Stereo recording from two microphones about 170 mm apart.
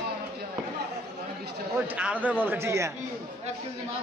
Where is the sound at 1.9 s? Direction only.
10° right (ahead or behind).